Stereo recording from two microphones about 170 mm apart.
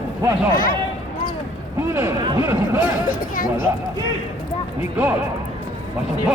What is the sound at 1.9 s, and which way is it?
Speech, 15° right (ahead or behind).